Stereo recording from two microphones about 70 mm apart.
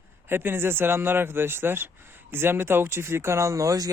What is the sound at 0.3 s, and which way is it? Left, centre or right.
Speech, right.